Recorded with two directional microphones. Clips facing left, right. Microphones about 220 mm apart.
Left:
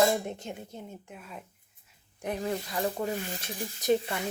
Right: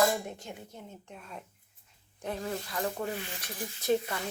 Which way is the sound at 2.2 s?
15° left (ahead or behind).